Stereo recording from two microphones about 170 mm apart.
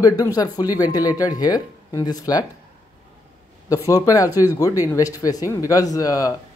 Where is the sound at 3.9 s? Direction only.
20° left (ahead or behind).